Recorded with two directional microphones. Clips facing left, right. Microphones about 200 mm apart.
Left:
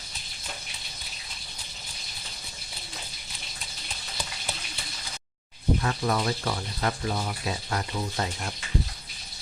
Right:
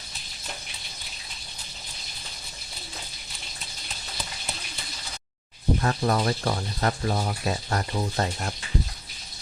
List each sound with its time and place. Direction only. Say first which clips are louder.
5.8 s speech: right 3 dB; 40° right (ahead or behind)